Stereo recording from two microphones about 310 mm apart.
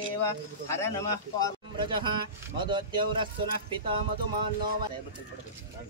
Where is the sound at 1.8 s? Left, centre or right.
Centre.